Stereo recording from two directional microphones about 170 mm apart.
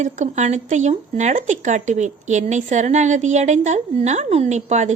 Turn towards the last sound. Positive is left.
turn(degrees=-45)  # may be behind; listen again after turning